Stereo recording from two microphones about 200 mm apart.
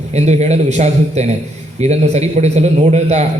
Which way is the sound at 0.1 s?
35° right (ahead or behind).